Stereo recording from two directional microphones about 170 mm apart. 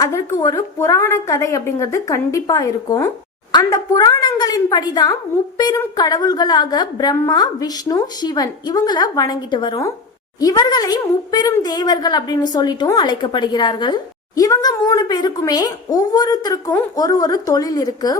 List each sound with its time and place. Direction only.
0.0 s a woman's voice: 20° left (ahead or behind)